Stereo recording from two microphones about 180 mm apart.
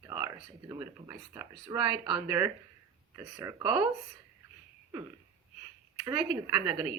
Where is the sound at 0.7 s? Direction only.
20° right (ahead or behind).